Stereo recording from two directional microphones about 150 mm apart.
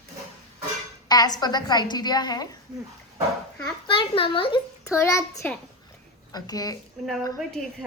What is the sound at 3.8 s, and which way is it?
Speech, 35° left (ahead or behind).